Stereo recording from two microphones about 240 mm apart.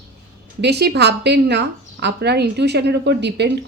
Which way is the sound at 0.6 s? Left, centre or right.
Right.